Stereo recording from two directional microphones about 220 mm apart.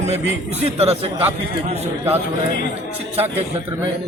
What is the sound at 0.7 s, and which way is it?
A man's voice, 30° right (ahead or behind).